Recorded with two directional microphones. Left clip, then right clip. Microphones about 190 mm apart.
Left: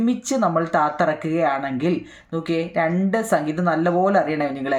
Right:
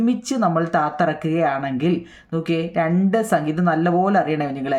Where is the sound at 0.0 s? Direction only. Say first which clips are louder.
Even; 20° right (ahead or behind).